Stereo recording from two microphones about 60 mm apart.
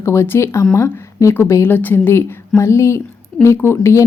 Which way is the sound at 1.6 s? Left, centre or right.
Left.